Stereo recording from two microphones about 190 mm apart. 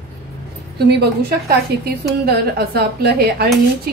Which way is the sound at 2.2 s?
55° right (ahead or behind).